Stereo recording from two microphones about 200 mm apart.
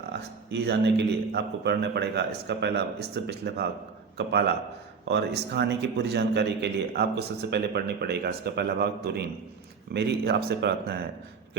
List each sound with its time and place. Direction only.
0.2 s a man's voice: 55° right (ahead or behind)